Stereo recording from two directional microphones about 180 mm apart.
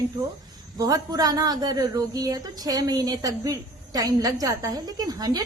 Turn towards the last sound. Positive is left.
turn(degrees=-20)  # may be behind; listen again after turning